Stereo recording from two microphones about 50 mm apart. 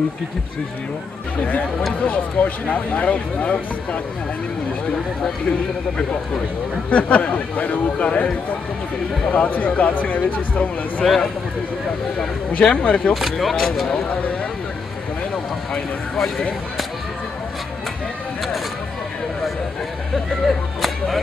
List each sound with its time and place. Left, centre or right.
2.0 s speech: left
6.9 s speech: left
12.5 s speech: left
13.1 s speech: centre
20.4 s whip: centre